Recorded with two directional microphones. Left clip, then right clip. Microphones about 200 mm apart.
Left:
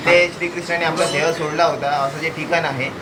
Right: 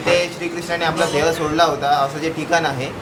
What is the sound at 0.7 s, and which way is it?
Speech, 20° right (ahead or behind).